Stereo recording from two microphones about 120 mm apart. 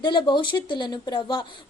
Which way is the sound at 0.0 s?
40° left (ahead or behind).